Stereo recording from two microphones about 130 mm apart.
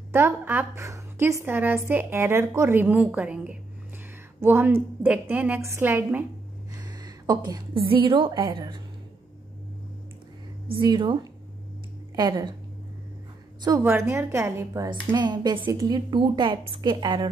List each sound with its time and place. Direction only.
0.1 s a woman's voice: 15° right (ahead or behind)
6.8 s a woman's voice: 30° right (ahead or behind)
10.7 s a woman's voice: 35° right (ahead or behind)
13.6 s a woman's voice: 25° right (ahead or behind)
15.1 s a woman's voice: 35° right (ahead or behind)